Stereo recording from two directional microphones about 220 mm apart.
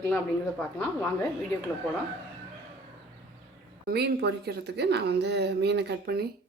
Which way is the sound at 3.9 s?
50° right (ahead or behind).